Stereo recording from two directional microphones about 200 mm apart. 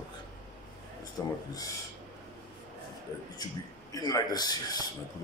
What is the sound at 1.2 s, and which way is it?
Speech, 15° left (ahead or behind).